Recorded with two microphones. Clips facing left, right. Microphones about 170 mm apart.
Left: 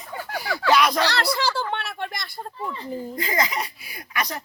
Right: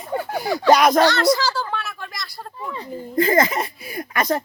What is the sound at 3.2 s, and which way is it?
A man's voice, 50° right (ahead or behind).